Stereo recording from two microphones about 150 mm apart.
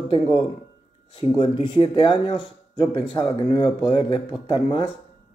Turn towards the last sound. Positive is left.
turn(degrees=30)  # may be behind; listen again after turning